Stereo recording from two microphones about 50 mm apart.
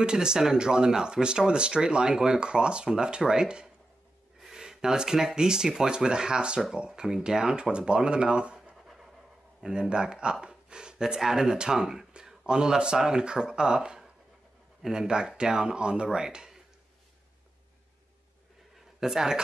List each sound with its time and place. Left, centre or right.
0.0 s speech: centre
9.6 s speech: centre
10.4 s a sound: centre
11.1 s speech: centre
18.9 s speech: centre